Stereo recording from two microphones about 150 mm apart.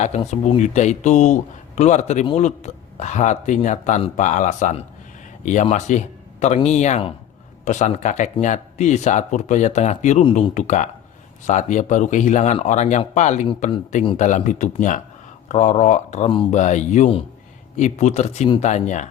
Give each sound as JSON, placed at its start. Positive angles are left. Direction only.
{"t": 0.3, "sound": "speech", "side_deg": 50}